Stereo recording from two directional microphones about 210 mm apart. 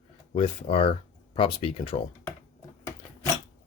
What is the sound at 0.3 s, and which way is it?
Speech, 25° left (ahead or behind).